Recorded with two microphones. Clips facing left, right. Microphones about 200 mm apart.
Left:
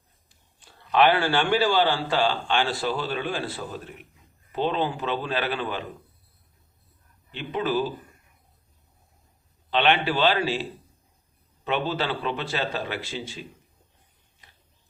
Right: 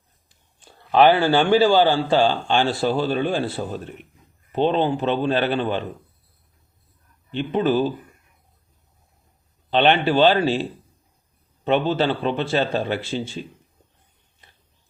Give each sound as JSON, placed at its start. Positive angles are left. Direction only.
{"t": 0.6, "sound": "a man's voice", "side_deg": -40}
{"t": 7.3, "sound": "a man's voice", "side_deg": -30}
{"t": 9.6, "sound": "a man's voice", "side_deg": -35}